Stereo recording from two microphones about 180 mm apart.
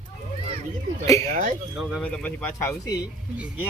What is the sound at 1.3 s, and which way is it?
Speech, 45° right (ahead or behind).